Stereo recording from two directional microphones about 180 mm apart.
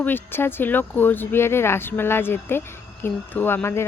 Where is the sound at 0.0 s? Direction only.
10° left (ahead or behind).